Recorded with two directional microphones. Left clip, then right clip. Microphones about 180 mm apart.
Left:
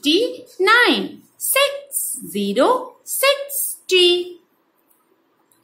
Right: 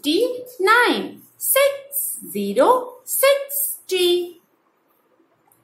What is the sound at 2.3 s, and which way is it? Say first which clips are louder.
Speech: even; 25° left (ahead or behind).